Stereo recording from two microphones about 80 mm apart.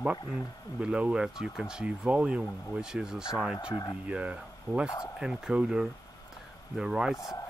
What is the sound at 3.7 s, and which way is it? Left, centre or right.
Speech, left.